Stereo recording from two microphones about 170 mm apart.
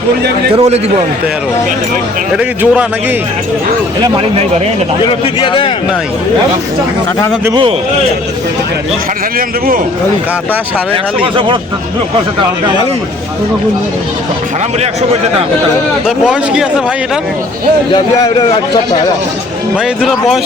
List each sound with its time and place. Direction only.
0.5 s speech: 40° right (ahead or behind)
2.3 s a man's voice: 5° right (ahead or behind)
4.0 s speech: 35° right (ahead or behind)
5.0 s a man's voice: 30° left (ahead or behind)
7.5 s speech: 30° right (ahead or behind)
14.8 s speech: 40° right (ahead or behind)
16.0 s speech: 5° right (ahead or behind)
17.9 s a man's voice: 25° left (ahead or behind)
19.7 s speech: 5° right (ahead or behind)